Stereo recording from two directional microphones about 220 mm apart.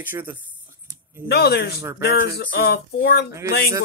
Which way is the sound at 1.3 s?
50° left (ahead or behind).